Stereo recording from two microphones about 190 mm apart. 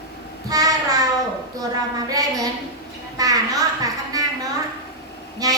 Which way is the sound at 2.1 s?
20° right (ahead or behind).